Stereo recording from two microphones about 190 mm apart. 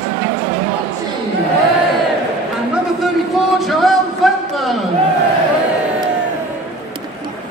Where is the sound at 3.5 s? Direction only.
Centre (ahead or behind).